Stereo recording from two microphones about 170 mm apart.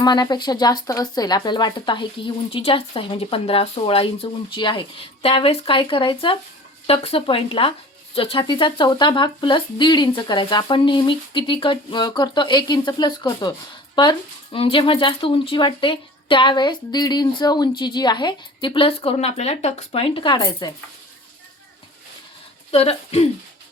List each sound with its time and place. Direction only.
0.0 s speech: 25° left (ahead or behind)
22.7 s speech: 35° left (ahead or behind)